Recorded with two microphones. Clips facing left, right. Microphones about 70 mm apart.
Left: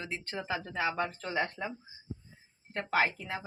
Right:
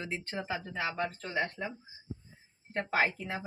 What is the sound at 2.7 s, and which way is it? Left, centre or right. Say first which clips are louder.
Speech: even; right.